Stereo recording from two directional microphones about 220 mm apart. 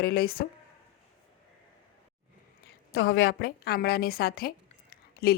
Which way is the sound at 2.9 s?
45° left (ahead or behind).